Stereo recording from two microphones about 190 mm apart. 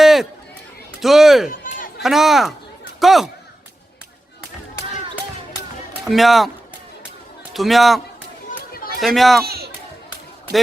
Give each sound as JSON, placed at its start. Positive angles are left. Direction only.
{"t": 0.0, "sound": "run", "side_deg": 0}
{"t": 1.0, "sound": "speech", "side_deg": 0}
{"t": 1.5, "sound": "a sound", "side_deg": 45}
{"t": 2.0, "sound": "speech", "side_deg": 0}
{"t": 6.1, "sound": "speech", "side_deg": 0}
{"t": 7.5, "sound": "speech", "side_deg": 0}
{"t": 8.4, "sound": "chatter", "side_deg": 50}
{"t": 9.0, "sound": "a man's voice", "side_deg": 0}
{"t": 9.4, "sound": "speech", "side_deg": -55}